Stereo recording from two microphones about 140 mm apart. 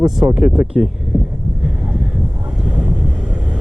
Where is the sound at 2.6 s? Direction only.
5° right (ahead or behind).